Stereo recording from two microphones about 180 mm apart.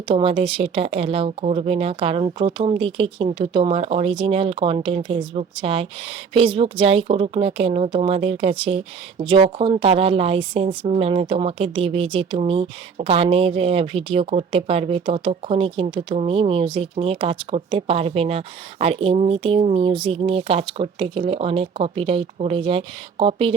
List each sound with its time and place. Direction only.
0.1 s speech: 30° right (ahead or behind)